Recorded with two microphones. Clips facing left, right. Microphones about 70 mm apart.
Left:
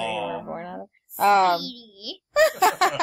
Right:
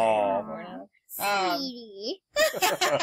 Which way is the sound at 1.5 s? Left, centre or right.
Centre.